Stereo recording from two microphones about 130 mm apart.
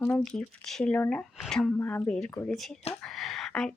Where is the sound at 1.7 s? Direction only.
15° left (ahead or behind).